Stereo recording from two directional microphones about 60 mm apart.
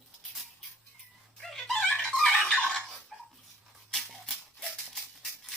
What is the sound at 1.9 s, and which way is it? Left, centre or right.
Music, centre.